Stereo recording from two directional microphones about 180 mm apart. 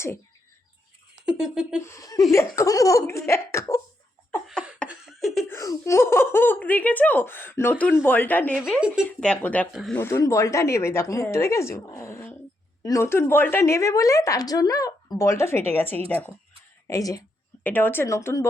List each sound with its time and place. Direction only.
1.2 s speech: 5° right (ahead or behind)
1.8 s a woman's voice: 15° left (ahead or behind)
4.4 s a sound: 5° right (ahead or behind)
4.9 s laughter: centre (ahead or behind)
5.5 s a woman's voice: 15° left (ahead or behind); by 10.0 s centre (ahead or behind)
10.0 s a woman's voice: 15° left (ahead or behind)